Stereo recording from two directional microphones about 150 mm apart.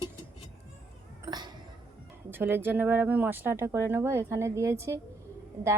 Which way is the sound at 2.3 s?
15° right (ahead or behind).